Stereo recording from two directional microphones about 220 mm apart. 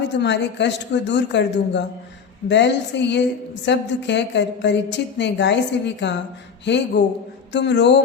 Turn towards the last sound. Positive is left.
turn(degrees=50)  # may be behind; listen again after turning